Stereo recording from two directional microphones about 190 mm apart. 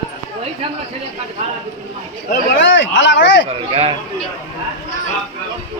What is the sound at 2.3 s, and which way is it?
Speech, 70° left (ahead or behind).